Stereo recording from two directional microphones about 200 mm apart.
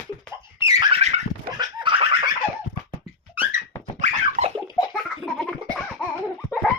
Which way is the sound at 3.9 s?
35° right (ahead or behind).